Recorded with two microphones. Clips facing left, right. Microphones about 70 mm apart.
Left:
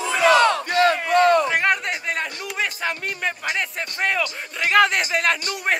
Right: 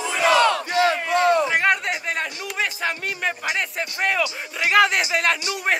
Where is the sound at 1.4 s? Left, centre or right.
Centre.